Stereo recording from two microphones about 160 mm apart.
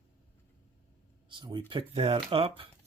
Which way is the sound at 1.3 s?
30° right (ahead or behind).